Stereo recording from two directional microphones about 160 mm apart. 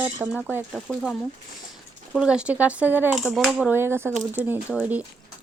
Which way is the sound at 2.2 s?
5° right (ahead or behind).